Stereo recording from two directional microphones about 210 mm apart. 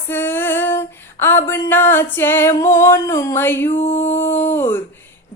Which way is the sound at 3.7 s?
30° left (ahead or behind).